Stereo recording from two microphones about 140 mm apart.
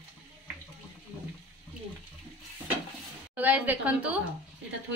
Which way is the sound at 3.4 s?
10° right (ahead or behind).